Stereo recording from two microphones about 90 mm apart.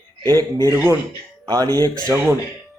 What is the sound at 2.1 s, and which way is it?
Speech, 25° right (ahead or behind).